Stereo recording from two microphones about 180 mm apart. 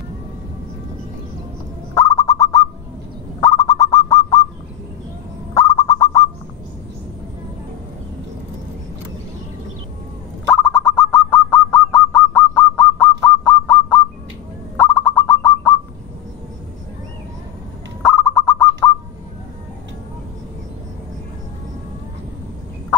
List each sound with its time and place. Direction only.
2.0 s bird: 15° left (ahead or behind)
5.5 s fowl: 15° left (ahead or behind)
10.5 s bird: 5° left (ahead or behind)
13.2 s a sound: 5° left (ahead or behind)
14.8 s bird: 10° left (ahead or behind)
18.0 s bird: 5° left (ahead or behind)